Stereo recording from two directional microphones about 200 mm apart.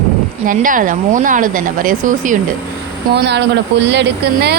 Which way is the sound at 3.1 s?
60° right (ahead or behind).